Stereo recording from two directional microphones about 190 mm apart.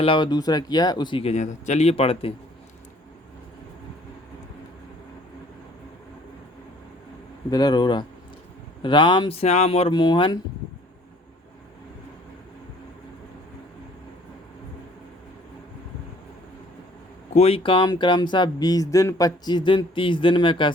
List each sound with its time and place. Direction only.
0.0 s speech: 25° left (ahead or behind)
7.5 s speech: 20° left (ahead or behind)
17.3 s speech: 30° left (ahead or behind)